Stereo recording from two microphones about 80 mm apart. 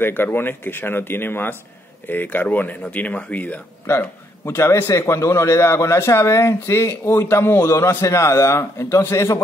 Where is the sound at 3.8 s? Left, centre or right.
Left.